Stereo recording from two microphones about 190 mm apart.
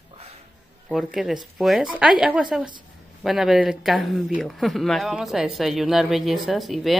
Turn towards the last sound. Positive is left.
turn(degrees=0)  # may be behind; listen again after turning